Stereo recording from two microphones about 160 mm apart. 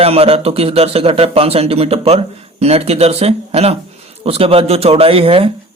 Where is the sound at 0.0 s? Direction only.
40° right (ahead or behind).